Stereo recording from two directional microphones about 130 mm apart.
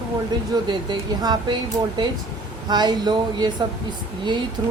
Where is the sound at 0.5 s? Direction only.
35° right (ahead or behind).